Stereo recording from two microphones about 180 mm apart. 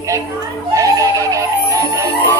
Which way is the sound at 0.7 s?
20° right (ahead or behind).